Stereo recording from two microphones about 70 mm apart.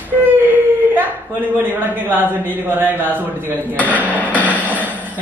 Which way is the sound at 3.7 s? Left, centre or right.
Left.